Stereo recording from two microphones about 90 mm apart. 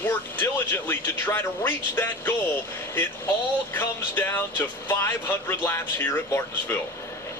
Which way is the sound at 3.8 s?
25° left (ahead or behind).